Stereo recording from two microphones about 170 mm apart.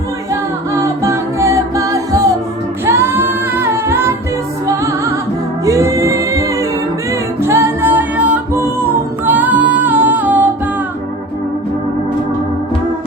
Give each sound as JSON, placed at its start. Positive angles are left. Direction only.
{"t": 0.8, "sound": "music", "side_deg": -15}
{"t": 2.8, "sound": "a capella", "side_deg": -15}
{"t": 4.6, "sound": "music", "side_deg": -15}
{"t": 9.2, "sound": "female singing", "side_deg": -10}